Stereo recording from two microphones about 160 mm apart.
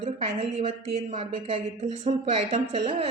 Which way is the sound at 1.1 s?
35° right (ahead or behind).